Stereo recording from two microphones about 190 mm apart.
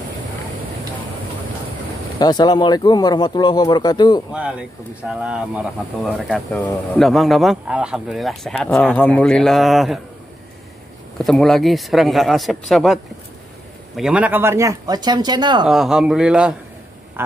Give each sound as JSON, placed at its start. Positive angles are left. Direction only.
{"t": 2.1, "sound": "speech", "side_deg": 20}
{"t": 4.3, "sound": "speech", "side_deg": -5}
{"t": 11.1, "sound": "speech", "side_deg": 0}
{"t": 15.6, "sound": "speech", "side_deg": -5}